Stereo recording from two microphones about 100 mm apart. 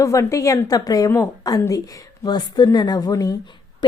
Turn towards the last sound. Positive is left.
turn(degrees=40)  # may be behind; listen again after turning